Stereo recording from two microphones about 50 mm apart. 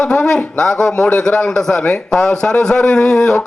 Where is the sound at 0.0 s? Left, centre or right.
Centre.